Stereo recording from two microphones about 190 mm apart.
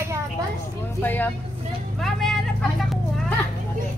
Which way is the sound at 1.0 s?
10° left (ahead or behind).